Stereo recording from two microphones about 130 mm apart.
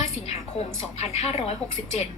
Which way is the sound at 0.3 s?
55° left (ahead or behind).